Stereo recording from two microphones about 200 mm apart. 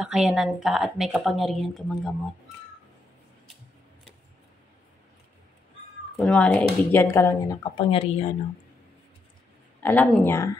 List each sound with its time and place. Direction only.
0.0 s speech: centre (ahead or behind)
6.1 s speech: 5° left (ahead or behind)
7.7 s speech: 30° left (ahead or behind)
9.8 s speech: 10° left (ahead or behind)